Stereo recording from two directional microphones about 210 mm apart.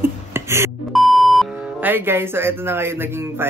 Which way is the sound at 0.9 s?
Centre (ahead or behind).